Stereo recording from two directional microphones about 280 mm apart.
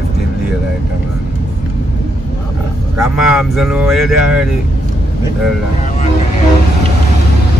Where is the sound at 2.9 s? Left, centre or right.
Centre.